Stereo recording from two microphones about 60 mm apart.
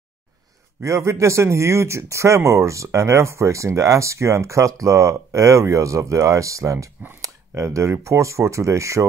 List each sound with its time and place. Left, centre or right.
0.8 s speech: right